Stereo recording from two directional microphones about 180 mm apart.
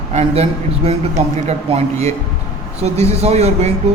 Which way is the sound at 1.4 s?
35° right (ahead or behind).